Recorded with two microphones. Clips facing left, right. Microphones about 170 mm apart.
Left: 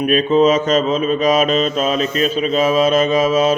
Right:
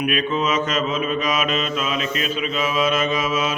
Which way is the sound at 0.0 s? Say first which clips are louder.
Left 9 dB; 35° left (ahead or behind).